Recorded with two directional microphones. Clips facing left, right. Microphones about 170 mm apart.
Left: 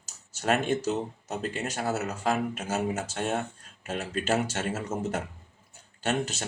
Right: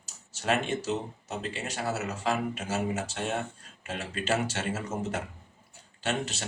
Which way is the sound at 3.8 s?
45° left (ahead or behind).